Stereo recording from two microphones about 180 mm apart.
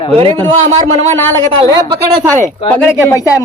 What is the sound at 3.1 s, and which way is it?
Speech, 15° left (ahead or behind).